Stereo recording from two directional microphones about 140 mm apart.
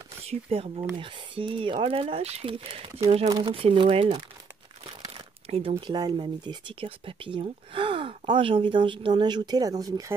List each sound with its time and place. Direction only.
0.2 s speech: 45° right (ahead or behind); by 10.1 s 25° right (ahead or behind)